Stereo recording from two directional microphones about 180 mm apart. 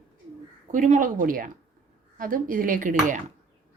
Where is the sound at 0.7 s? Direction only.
45° right (ahead or behind).